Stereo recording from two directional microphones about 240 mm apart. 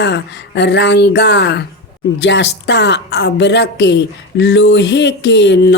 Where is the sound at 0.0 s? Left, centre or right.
Left.